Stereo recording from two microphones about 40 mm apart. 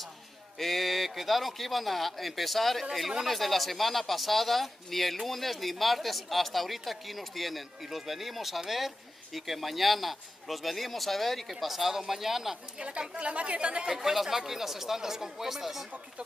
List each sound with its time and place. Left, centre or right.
0.6 s speech: centre
3.3 s speech: centre
13.1 s speech: right
13.9 s speech: centre